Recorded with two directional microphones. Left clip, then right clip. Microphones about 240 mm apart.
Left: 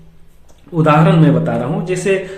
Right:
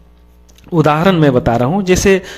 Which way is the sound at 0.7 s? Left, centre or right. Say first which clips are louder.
Right 1 dB; right.